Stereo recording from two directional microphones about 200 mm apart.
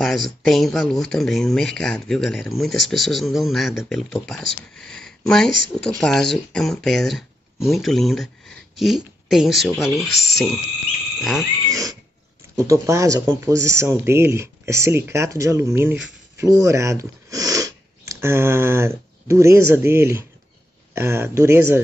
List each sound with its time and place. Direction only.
0.0 s speech: centre (ahead or behind)
11.6 s pig: 15° right (ahead or behind)
12.5 s speech: 15° right (ahead or behind)